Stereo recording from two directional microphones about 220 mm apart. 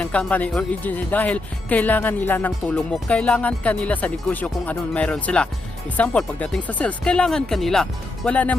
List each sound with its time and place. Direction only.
0.0 s speech: 5° left (ahead or behind)